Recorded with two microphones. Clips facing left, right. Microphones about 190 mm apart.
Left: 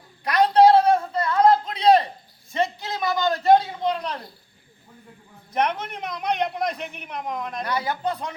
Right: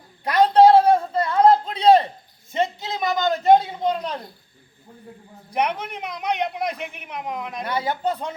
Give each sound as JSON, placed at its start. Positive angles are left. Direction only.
{"t": 0.3, "sound": "a sound", "side_deg": -25}
{"t": 5.5, "sound": "a man's voice", "side_deg": -10}
{"t": 7.6, "sound": "speech", "side_deg": -25}